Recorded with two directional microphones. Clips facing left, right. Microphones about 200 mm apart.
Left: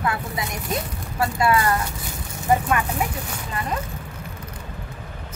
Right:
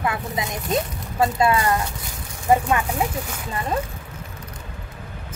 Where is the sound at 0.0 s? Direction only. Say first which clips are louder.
Right 1 dB; 20° right (ahead or behind).